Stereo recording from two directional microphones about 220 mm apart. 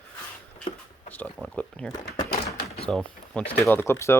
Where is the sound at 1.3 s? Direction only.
Centre (ahead or behind).